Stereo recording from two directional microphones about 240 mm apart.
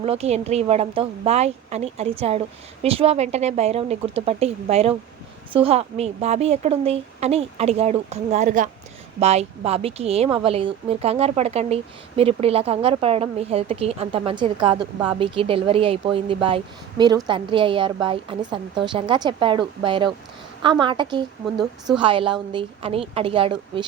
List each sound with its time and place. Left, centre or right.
0.0 s speech: right
21.4 s a woman's voice: centre
21.9 s speech: right